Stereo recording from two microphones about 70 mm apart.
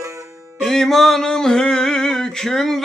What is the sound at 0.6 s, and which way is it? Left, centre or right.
Music, centre.